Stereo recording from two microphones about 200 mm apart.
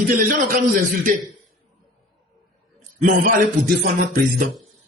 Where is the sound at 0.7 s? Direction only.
40° right (ahead or behind).